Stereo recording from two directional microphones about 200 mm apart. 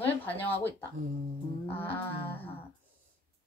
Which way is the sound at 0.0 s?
10° left (ahead or behind).